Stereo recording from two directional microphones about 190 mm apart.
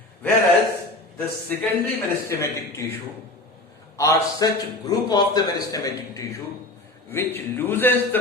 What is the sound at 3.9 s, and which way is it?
A man's voice, 15° left (ahead or behind).